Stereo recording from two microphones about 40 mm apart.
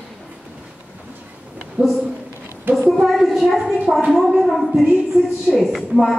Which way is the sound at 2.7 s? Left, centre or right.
Right.